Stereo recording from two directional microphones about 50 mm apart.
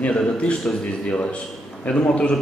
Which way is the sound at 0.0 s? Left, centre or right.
Left.